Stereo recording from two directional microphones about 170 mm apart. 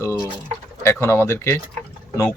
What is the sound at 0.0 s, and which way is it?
Bird, 15° left (ahead or behind).